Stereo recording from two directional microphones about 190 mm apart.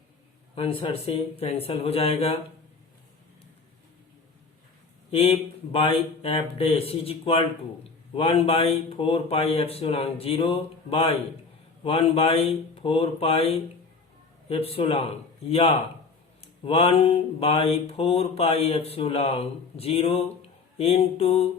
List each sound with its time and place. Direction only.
0.5 s mantra: 30° left (ahead or behind)
5.1 s mantra: 30° left (ahead or behind)